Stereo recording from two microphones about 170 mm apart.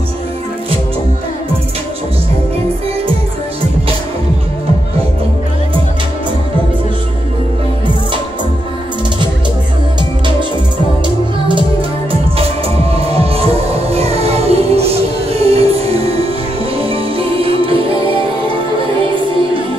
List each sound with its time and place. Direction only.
12.4 s music: 35° right (ahead or behind)